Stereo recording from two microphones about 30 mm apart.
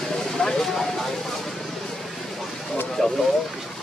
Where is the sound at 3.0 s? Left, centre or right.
Centre.